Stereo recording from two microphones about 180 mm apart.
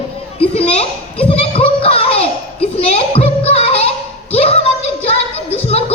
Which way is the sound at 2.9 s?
35° left (ahead or behind).